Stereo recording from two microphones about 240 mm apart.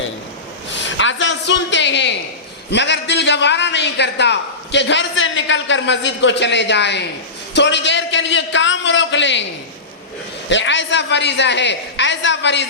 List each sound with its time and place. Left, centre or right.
0.7 s a woman's voice: left
10.5 s a man's voice: left